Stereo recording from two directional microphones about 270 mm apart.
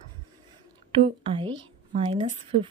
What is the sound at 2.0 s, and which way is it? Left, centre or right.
Speech, centre.